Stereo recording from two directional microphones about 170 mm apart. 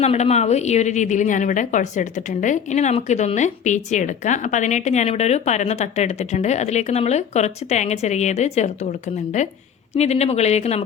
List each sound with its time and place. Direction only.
0.0 s a woman's voice: 40° left (ahead or behind)